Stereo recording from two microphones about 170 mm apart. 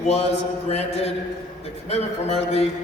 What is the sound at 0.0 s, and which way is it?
A man's voice, 35° left (ahead or behind).